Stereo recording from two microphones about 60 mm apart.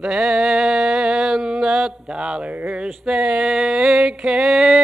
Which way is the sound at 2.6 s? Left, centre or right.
Centre.